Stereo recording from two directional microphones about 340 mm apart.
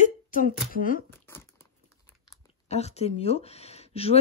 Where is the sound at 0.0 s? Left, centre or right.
Left.